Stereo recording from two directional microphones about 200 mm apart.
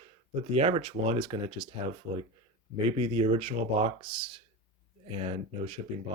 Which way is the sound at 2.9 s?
25° right (ahead or behind).